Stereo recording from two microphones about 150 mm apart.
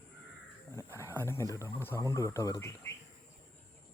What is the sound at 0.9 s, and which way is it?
Speech, 15° left (ahead or behind).